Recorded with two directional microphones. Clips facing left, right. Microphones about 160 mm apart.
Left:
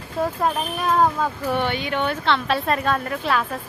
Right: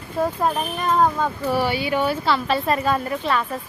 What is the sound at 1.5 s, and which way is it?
A woman's voice, 5° right (ahead or behind).